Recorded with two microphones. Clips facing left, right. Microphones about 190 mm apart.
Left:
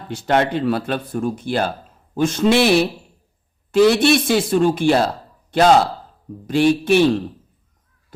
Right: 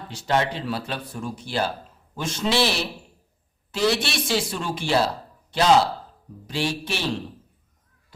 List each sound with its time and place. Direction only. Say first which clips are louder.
0.1 s speech: left 6 dB; 55° left (ahead or behind)